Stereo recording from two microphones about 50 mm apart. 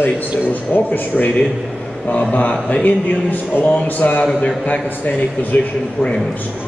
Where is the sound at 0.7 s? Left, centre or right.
Left.